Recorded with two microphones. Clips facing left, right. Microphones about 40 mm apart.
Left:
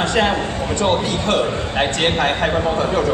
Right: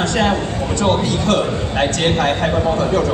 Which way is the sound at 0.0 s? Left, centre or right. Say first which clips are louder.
Even; centre.